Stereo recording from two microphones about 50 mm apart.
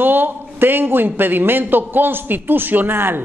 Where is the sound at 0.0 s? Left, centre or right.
Right.